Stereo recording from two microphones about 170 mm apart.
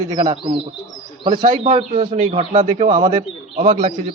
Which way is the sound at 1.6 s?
30° right (ahead or behind).